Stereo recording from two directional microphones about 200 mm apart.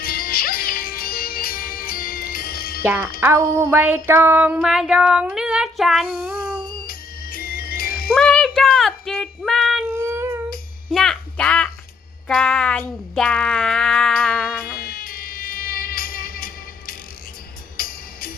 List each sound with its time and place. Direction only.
0.0 s music: 45° left (ahead or behind)
2.8 s speech: 10° right (ahead or behind)
3.2 s a sound: 10° right (ahead or behind)
6.8 s music: 45° left (ahead or behind)
8.1 s child singing: 5° left (ahead or behind)
10.1 s humming: 10° right (ahead or behind)
10.9 s a sound: centre (ahead or behind)
12.3 s speech: 5° left (ahead or behind)
14.8 s music: 50° left (ahead or behind)